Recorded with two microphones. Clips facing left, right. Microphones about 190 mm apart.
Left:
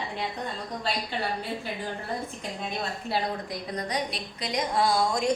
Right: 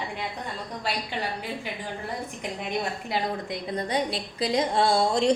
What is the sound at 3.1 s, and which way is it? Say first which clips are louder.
A woman's voice: right 1 dB; 25° right (ahead or behind).